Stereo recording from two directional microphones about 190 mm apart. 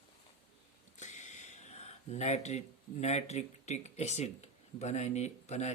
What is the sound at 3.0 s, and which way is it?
Speech, 35° left (ahead or behind).